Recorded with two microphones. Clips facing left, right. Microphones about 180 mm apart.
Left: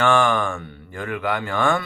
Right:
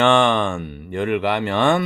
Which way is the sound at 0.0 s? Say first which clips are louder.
Right 3 dB; 25° right (ahead or behind).